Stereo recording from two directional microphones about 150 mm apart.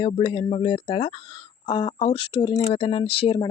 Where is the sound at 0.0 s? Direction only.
35° left (ahead or behind).